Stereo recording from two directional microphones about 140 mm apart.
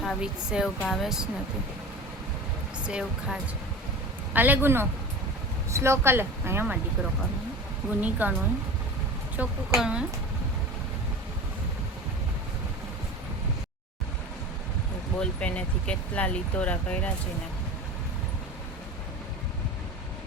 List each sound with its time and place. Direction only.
0.0 s speech: 5° right (ahead or behind)
2.8 s speech: 5° right (ahead or behind)
4.4 s speech: 15° right (ahead or behind)
8.0 s speech: 10° right (ahead or behind)
9.4 s speech: 10° right (ahead or behind)
15.2 s speech: 10° left (ahead or behind)